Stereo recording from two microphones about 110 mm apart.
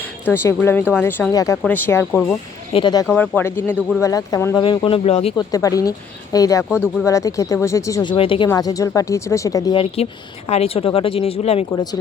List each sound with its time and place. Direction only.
0.3 s speech: 20° left (ahead or behind)
1.3 s speech: 30° left (ahead or behind)
1.6 s speech: 15° left (ahead or behind)
2.7 s speech: 60° left (ahead or behind)
3.1 s speech: 20° left (ahead or behind)
4.0 s speech: 30° left (ahead or behind)
4.5 s speech: 50° left (ahead or behind); by 5.3 s 65° left (ahead or behind)
5.4 s speech: 30° left (ahead or behind)
8.0 s speech: 55° left (ahead or behind)
8.5 s speech: 35° left (ahead or behind)
9.7 s speech: 65° left (ahead or behind)